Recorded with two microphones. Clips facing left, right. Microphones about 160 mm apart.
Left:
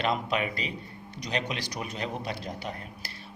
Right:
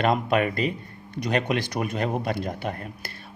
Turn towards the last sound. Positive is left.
turn(degrees=-55)  # may be behind; listen again after turning